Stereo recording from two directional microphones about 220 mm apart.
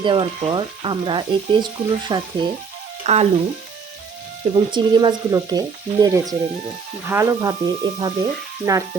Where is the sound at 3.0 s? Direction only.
30° right (ahead or behind).